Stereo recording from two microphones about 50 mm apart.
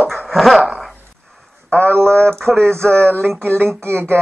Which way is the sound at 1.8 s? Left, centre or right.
Right.